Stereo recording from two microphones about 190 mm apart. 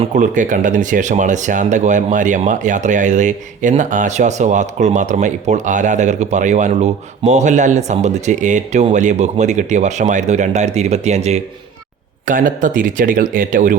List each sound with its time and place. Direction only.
0.0 s speech: 40° right (ahead or behind)